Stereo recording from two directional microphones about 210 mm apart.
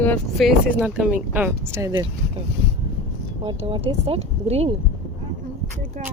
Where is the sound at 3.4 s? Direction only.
25° right (ahead or behind).